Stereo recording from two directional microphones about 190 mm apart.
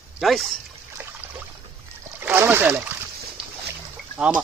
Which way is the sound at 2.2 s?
10° right (ahead or behind).